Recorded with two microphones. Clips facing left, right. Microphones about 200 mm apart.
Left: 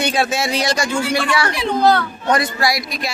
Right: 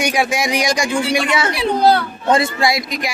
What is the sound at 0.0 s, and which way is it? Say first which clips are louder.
A man's voice: right 1 dB; 15° right (ahead or behind).